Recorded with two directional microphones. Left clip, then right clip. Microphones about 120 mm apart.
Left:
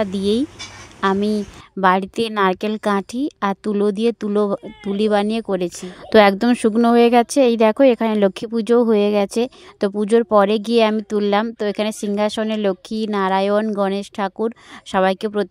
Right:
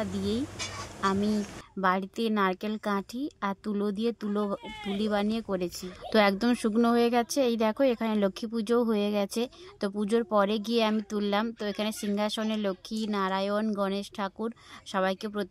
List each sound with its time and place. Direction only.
0.0 s a woman's voice: 75° left (ahead or behind)